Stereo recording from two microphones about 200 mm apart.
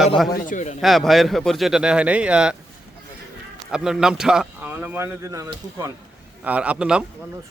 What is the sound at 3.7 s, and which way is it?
Speech, 5° right (ahead or behind).